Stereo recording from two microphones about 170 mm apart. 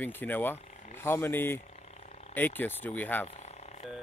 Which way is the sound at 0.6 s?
45° left (ahead or behind).